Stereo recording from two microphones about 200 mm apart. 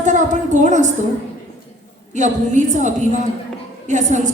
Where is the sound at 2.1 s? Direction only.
35° right (ahead or behind).